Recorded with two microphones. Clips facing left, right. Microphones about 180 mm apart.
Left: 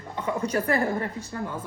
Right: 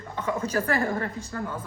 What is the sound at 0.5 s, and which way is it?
Speech, 20° left (ahead or behind).